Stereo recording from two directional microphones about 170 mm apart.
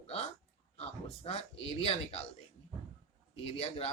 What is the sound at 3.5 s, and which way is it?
Speech, 35° left (ahead or behind).